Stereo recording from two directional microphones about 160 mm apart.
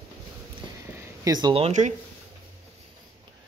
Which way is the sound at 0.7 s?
20° right (ahead or behind).